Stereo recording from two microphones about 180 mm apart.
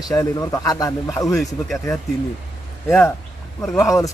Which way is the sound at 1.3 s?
Centre (ahead or behind).